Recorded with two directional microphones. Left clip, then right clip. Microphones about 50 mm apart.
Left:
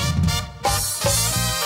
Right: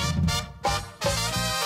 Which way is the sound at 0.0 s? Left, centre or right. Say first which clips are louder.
Left 3 dB; right.